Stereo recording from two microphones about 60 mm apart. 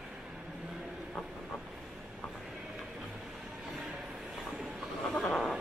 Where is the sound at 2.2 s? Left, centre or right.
Centre.